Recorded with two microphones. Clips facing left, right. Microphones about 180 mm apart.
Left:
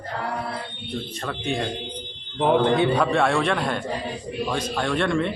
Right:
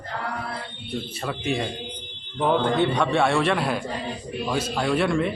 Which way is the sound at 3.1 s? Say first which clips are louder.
Even; centre (ahead or behind).